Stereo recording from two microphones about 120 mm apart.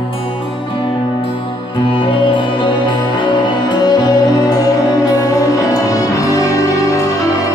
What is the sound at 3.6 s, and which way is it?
Music, 35° left (ahead or behind).